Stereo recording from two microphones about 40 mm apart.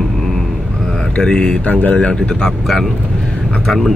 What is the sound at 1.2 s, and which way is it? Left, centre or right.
Speech, left.